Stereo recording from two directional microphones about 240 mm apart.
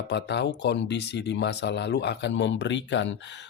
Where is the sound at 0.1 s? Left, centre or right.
Left.